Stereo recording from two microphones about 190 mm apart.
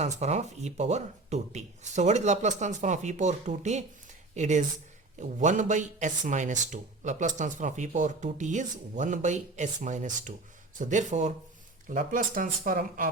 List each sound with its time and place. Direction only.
0.0 s speech: 35° right (ahead or behind)